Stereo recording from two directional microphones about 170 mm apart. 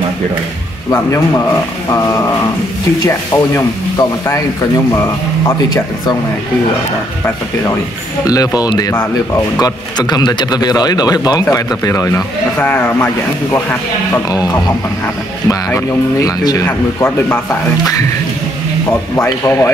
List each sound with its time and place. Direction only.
0.8 s a man's voice: 20° left (ahead or behind)
8.3 s a man's voice: 20° left (ahead or behind)
19.1 s speech: 15° left (ahead or behind)